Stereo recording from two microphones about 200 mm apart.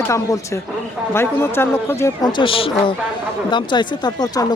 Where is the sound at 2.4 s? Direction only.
25° left (ahead or behind).